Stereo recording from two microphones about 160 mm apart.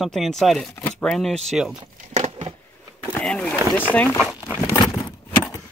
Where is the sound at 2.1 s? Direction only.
45° right (ahead or behind).